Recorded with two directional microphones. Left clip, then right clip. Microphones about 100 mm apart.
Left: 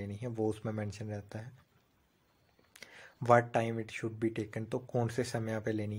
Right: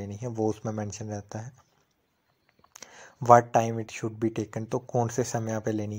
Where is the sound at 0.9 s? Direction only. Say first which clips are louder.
Right 6 dB; 30° right (ahead or behind).